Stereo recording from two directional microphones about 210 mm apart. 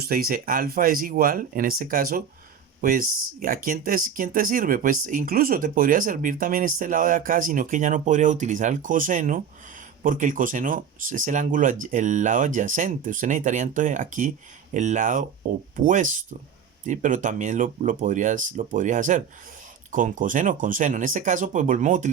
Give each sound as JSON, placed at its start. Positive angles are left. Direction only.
{"t": 0.0, "sound": "speech", "side_deg": -45}